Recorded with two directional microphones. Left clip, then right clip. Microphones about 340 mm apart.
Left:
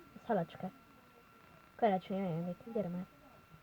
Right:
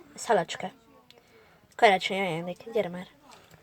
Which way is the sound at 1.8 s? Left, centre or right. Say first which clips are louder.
Right 12 dB; centre.